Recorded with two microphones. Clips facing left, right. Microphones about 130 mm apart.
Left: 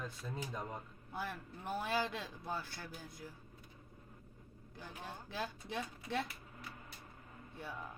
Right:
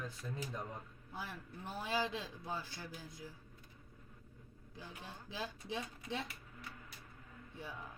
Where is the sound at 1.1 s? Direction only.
55° left (ahead or behind).